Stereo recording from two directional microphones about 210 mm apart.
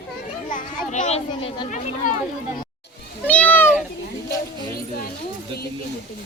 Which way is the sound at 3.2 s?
5° left (ahead or behind).